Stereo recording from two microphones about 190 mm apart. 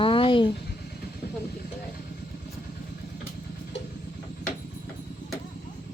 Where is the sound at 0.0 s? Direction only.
25° left (ahead or behind).